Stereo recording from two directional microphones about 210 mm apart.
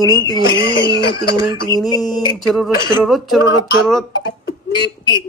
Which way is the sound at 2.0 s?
Centre (ahead or behind).